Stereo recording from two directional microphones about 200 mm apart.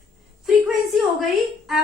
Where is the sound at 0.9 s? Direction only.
Centre (ahead or behind).